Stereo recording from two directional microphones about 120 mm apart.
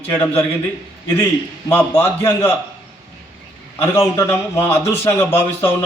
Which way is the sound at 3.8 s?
20° left (ahead or behind).